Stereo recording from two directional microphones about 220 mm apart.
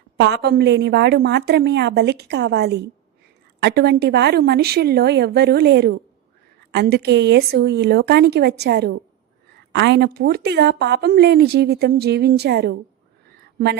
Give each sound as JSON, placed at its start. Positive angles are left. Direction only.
{"t": 0.2, "sound": "a woman's voice", "side_deg": -50}